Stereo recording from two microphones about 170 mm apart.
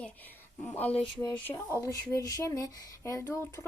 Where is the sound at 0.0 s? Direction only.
10° left (ahead or behind).